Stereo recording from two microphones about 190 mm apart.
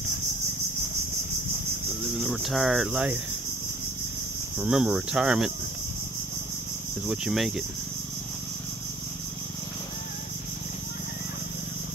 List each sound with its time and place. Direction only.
2.1 s speech: centre (ahead or behind)
4.6 s speech: 5° right (ahead or behind)
7.1 s speech: centre (ahead or behind)